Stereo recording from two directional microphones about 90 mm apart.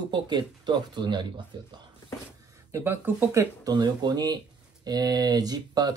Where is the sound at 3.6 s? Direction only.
50° right (ahead or behind).